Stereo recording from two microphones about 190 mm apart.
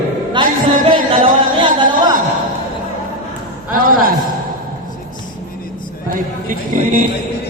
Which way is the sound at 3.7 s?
45° right (ahead or behind).